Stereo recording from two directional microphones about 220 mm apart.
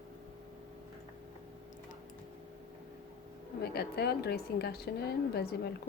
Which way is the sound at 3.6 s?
45° left (ahead or behind).